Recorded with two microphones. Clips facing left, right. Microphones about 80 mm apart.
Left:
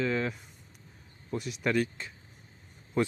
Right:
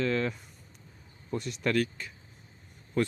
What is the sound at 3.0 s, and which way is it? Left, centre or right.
Speech, centre.